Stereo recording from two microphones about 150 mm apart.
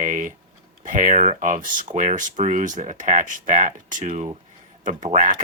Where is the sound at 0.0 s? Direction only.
60° right (ahead or behind).